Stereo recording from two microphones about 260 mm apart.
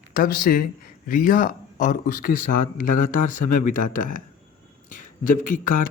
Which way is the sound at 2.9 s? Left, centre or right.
Left.